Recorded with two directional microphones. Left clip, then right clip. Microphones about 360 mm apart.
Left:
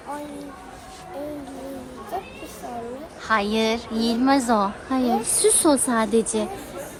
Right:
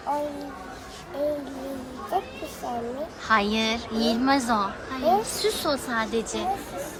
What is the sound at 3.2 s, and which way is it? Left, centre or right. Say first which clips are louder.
A woman's voice: left 2 dB; centre.